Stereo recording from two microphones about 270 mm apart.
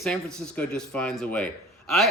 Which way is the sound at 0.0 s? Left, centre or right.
Centre.